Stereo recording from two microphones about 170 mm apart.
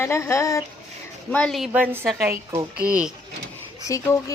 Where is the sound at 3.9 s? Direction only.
20° left (ahead or behind).